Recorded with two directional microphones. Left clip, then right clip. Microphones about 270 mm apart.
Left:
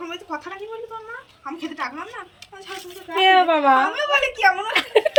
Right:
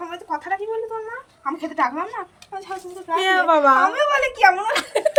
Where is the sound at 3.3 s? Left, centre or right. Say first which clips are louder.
Right 3 dB; centre.